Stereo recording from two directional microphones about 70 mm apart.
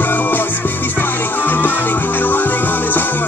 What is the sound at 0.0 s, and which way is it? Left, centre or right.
Music, left.